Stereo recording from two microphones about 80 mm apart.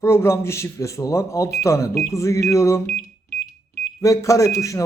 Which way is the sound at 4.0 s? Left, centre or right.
Left.